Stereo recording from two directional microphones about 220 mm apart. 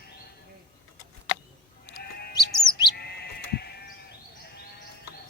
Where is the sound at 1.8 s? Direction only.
45° left (ahead or behind).